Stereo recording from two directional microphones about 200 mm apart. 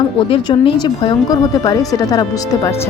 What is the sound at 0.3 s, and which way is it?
Speech, 25° left (ahead or behind).